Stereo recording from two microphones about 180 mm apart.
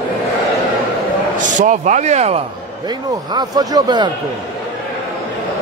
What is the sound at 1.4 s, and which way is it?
A man's voice, 45° right (ahead or behind).